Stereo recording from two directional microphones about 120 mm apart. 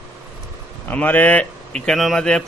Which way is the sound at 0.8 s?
15° left (ahead or behind).